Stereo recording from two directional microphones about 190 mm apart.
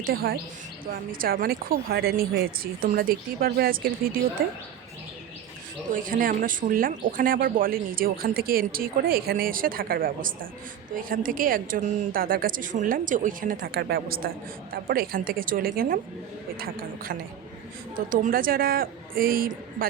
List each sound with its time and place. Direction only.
0.0 s a woman's voice: 50° right (ahead or behind)
5.9 s a woman's voice: 45° right (ahead or behind)